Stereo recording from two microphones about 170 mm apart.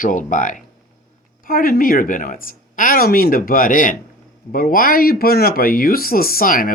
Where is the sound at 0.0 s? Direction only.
50° left (ahead or behind).